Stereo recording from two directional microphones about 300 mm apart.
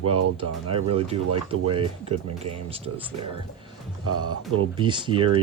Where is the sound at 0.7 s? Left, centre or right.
Centre.